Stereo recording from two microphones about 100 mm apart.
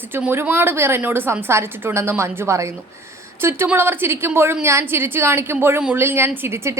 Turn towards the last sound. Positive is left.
turn(degrees=-25)  # may be behind; listen again after turning